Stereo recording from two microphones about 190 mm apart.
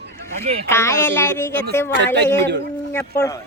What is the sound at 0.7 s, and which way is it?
Speech, 15° left (ahead or behind).